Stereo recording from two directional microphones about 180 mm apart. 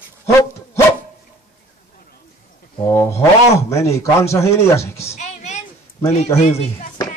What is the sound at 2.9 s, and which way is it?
A man's voice, 15° left (ahead or behind).